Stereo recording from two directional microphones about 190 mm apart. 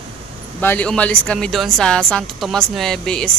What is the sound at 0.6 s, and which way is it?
Speech, 10° left (ahead or behind).